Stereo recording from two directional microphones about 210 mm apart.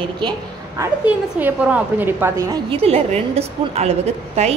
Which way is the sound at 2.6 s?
30° right (ahead or behind).